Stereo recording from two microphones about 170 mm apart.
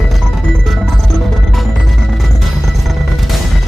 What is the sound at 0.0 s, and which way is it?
Music, centre (ahead or behind).